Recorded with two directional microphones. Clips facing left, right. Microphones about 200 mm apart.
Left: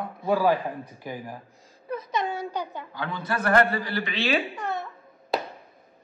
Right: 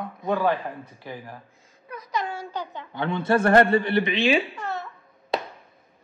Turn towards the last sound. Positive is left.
turn(degrees=0)  # may be behind; listen again after turning